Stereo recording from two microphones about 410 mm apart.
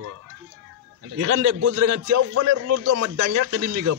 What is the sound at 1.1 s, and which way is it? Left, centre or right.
A man's voice, right.